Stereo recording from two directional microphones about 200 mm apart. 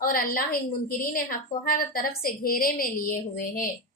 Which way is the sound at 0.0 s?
45° left (ahead or behind).